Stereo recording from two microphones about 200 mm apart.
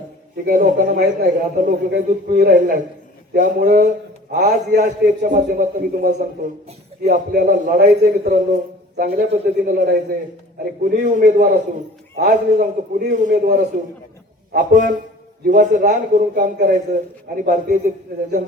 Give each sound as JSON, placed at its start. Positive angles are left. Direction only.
{"t": 0.4, "sound": "a man's voice", "side_deg": -45}